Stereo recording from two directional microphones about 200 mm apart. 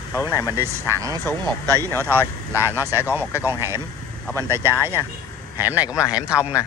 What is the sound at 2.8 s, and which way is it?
Speech, 10° right (ahead or behind).